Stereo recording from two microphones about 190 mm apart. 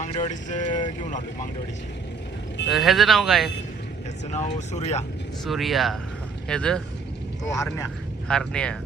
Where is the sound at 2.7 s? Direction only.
Centre (ahead or behind).